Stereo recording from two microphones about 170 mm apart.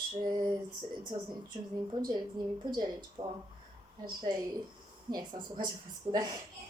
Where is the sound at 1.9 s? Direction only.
25° right (ahead or behind).